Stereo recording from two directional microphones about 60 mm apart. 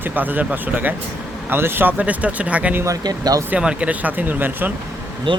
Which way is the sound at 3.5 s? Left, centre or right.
Right.